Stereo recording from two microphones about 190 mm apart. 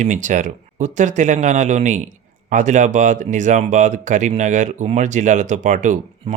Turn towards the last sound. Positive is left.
turn(degrees=-40)  # may be behind; listen again after turning